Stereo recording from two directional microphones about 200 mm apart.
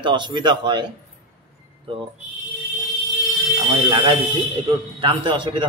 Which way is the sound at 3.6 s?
25° right (ahead or behind).